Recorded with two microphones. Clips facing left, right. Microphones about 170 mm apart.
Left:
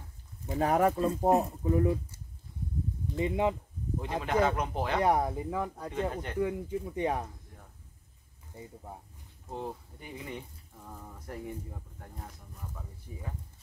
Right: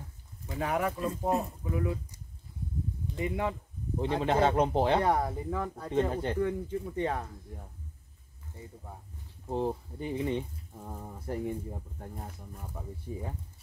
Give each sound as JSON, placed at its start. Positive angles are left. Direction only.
{"t": 0.6, "sound": "speech", "side_deg": 40}
{"t": 3.2, "sound": "speech", "side_deg": 20}
{"t": 4.0, "sound": "speech", "side_deg": -30}
{"t": 5.0, "sound": "speech", "side_deg": 10}
{"t": 5.9, "sound": "speech", "side_deg": -30}
{"t": 6.4, "sound": "speech", "side_deg": 10}
{"t": 9.5, "sound": "speech", "side_deg": -30}
{"t": 13.1, "sound": "speech", "side_deg": -30}